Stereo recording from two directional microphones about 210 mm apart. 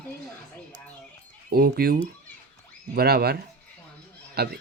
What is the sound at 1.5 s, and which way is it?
Speech, 45° right (ahead or behind).